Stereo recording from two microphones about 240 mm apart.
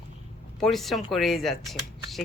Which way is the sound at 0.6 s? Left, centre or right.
Centre.